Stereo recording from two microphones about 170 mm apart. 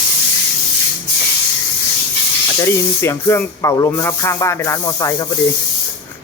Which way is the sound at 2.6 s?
15° left (ahead or behind).